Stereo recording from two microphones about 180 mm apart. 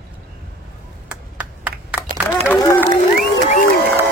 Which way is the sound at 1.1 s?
5° right (ahead or behind).